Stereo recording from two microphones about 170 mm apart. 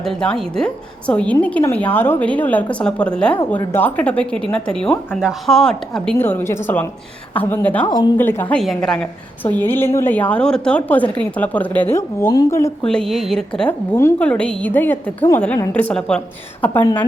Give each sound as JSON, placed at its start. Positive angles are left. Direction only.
{"t": 0.0, "sound": "a woman's voice", "side_deg": 5}
{"t": 7.9, "sound": "speech", "side_deg": 25}
{"t": 8.2, "sound": "a woman's voice", "side_deg": 10}
{"t": 12.8, "sound": "a woman's voice", "side_deg": 5}